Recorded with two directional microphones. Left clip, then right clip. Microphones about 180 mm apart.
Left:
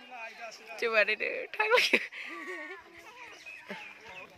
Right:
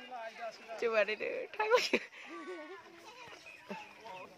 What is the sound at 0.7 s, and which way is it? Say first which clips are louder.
Speech: left 5 dB; 5° left (ahead or behind).